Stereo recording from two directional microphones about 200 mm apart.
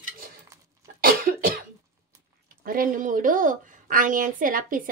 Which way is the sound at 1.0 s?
45° right (ahead or behind).